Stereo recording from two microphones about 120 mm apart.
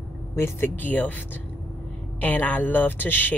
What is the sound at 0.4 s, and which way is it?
Speech, 15° left (ahead or behind).